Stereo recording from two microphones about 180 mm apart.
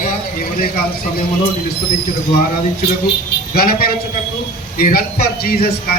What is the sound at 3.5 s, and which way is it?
A man's voice, 55° left (ahead or behind).